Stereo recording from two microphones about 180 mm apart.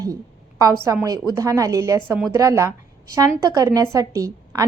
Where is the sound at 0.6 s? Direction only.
20° right (ahead or behind).